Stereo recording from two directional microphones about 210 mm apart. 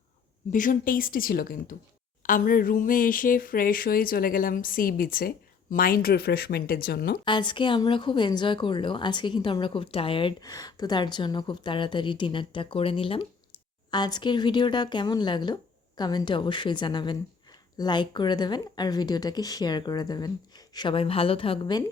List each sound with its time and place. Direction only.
0.5 s speech: 40° left (ahead or behind)
7.3 s a woman's voice: 20° left (ahead or behind)